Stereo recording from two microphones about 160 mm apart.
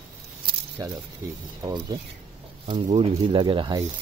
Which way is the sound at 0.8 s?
20° right (ahead or behind).